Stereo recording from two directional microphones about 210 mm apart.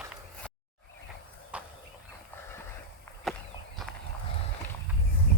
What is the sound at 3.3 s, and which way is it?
Walk, centre (ahead or behind).